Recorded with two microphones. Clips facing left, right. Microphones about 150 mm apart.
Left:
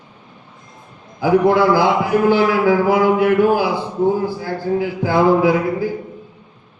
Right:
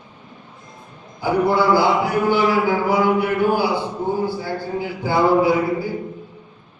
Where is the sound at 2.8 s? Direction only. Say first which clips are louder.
Left 4 dB; 90° left.